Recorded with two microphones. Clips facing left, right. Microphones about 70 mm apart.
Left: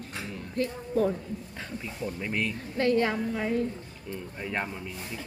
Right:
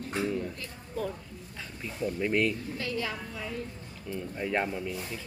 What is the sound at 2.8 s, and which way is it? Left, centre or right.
Speech, left.